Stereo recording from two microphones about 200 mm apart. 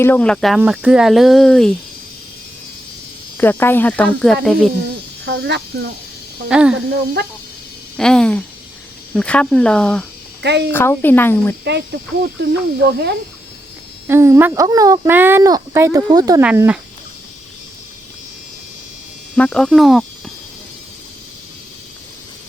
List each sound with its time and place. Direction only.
0.0 s speech: 10° left (ahead or behind)
3.3 s speech: 10° left (ahead or behind)
5.2 s speech: 60° right (ahead or behind)
6.5 s speech: 5° right (ahead or behind)
6.7 s speech: 55° right (ahead or behind)
7.9 s speech: 5° left (ahead or behind)
10.4 s speech: 55° right (ahead or behind)
10.7 s speech: 10° left (ahead or behind)
11.6 s speech: 60° right (ahead or behind)
14.1 s speech: 15° right (ahead or behind)
16.4 s speech: 5° right (ahead or behind)
19.4 s speech: 5° left (ahead or behind)